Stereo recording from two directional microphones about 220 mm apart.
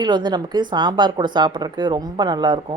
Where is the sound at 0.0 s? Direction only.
20° right (ahead or behind).